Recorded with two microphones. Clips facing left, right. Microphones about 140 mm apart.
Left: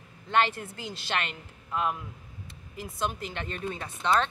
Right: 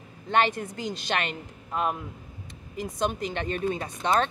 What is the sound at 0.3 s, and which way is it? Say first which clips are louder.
Speech: right 2 dB; 15° right (ahead or behind).